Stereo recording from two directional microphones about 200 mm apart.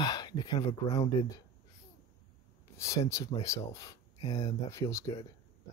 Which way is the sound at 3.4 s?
15° left (ahead or behind).